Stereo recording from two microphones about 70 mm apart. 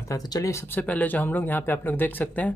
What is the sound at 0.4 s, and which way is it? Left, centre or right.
Speech, left.